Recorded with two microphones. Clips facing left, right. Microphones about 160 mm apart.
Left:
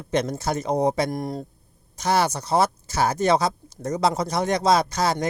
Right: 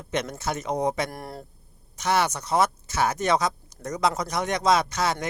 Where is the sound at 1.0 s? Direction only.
20° left (ahead or behind).